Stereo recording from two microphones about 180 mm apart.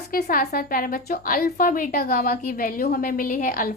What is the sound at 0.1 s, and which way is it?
A woman's voice, 55° left (ahead or behind).